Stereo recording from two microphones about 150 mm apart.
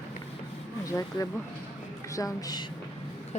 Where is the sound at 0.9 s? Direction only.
20° left (ahead or behind).